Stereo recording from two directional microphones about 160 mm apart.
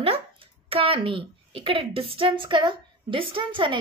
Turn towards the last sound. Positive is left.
turn(degrees=-30)  # may be behind; listen again after turning